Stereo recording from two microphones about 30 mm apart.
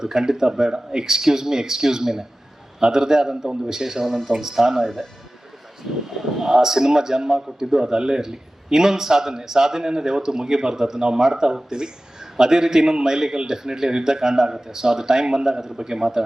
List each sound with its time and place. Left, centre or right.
0.0 s a man's voice: centre